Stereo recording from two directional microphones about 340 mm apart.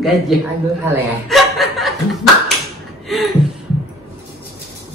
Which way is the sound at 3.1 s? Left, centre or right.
Centre.